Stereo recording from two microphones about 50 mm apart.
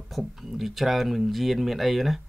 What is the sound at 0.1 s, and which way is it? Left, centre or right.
Speech, centre.